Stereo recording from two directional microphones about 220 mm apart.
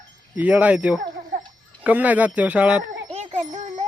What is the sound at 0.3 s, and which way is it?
Speech, 5° right (ahead or behind).